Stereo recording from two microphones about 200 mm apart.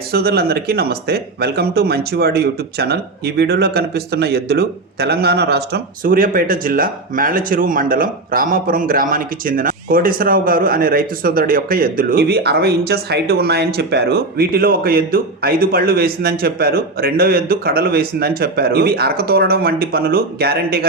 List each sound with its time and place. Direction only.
0.1 s speech: 50° right (ahead or behind)